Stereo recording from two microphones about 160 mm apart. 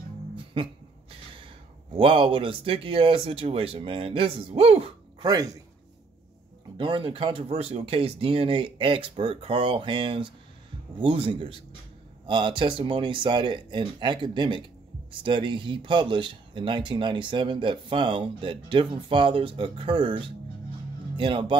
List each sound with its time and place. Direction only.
0.6 s speech: 35° right (ahead or behind)
1.9 s speech: 35° right (ahead or behind)
5.2 s a man's voice: 25° right (ahead or behind)
6.8 s speech: 30° right (ahead or behind)